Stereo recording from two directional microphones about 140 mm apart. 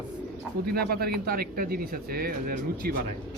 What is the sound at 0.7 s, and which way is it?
Speech, 90° right.